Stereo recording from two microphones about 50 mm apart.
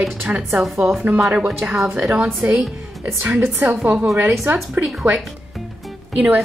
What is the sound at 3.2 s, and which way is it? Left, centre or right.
Speech, right.